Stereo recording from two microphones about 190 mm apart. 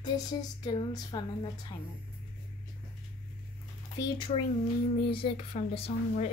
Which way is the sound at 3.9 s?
25° left (ahead or behind).